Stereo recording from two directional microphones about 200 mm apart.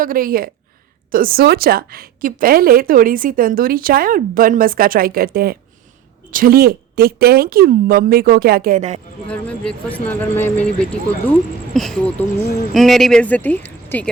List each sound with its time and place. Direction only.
0.0 s a woman's voice: 45° right (ahead or behind)
9.2 s speech: 5° left (ahead or behind)